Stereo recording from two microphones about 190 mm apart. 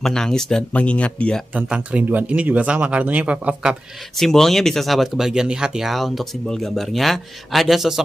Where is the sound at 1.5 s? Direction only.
5° right (ahead or behind).